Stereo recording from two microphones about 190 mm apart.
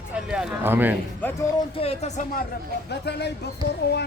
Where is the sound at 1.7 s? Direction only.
30° left (ahead or behind).